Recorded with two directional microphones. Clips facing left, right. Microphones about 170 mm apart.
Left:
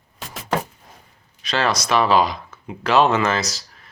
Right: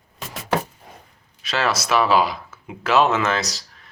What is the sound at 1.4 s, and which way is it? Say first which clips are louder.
Speech: left 1 dB; 5° right (ahead or behind).